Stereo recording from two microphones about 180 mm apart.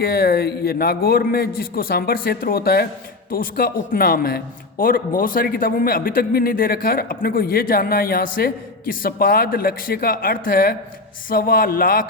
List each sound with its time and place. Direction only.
0.0 s a man's voice: 60° left (ahead or behind)